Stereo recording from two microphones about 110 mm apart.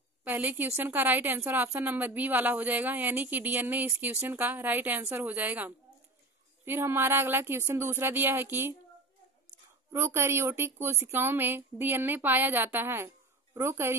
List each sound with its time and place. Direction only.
0.2 s a woman's voice: 15° right (ahead or behind)
9.9 s a woman's voice: 25° right (ahead or behind)